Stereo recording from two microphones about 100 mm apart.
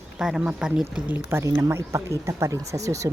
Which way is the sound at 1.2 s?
25° right (ahead or behind).